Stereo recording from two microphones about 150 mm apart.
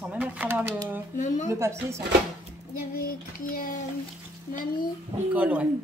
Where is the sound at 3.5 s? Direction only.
70° left (ahead or behind).